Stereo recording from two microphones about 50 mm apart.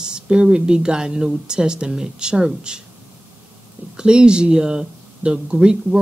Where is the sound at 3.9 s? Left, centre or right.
Centre.